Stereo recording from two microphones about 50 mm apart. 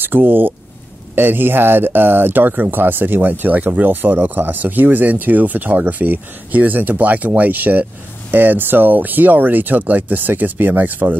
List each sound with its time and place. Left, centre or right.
0.0 s speech: right